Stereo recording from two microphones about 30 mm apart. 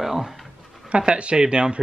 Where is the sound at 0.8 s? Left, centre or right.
Right.